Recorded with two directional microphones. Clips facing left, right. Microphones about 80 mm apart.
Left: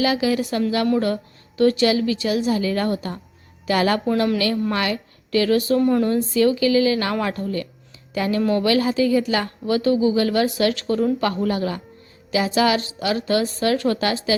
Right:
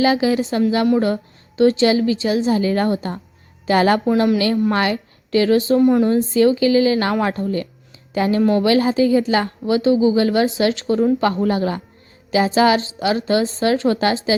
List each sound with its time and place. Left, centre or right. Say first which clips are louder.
0.0 s a woman's voice: right 4 dB; right
5.8 s speech: right 4 dB; centre
6.1 s a woman's voice: right 3 dB; right